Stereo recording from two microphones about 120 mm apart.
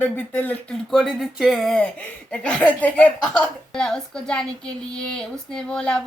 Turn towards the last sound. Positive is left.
turn(degrees=5)  # may be behind; listen again after turning